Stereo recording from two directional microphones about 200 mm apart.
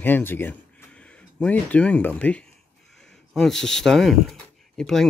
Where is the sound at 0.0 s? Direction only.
10° left (ahead or behind).